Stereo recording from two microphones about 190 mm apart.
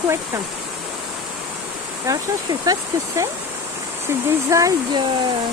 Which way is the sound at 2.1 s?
15° right (ahead or behind).